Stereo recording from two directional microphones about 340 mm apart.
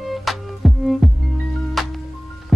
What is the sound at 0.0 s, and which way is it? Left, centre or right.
Music, centre.